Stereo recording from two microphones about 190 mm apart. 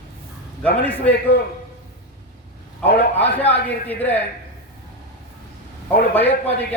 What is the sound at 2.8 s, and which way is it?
Speech, 55° left (ahead or behind).